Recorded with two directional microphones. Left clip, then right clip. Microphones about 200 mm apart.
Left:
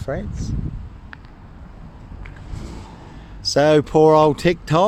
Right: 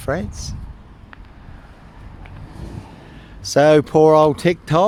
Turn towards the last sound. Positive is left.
turn(degrees=-5)  # may be behind; listen again after turning